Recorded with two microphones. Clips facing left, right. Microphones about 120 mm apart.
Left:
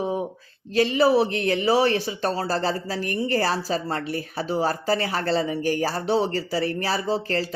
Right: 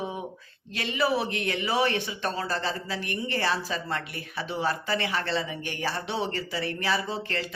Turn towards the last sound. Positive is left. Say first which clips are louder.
# left 6 dB
turn(degrees=35)  # may be behind; listen again after turning